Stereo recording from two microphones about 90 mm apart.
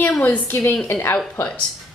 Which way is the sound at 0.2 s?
25° left (ahead or behind).